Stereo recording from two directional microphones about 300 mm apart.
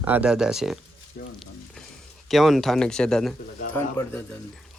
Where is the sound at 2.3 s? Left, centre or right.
Centre.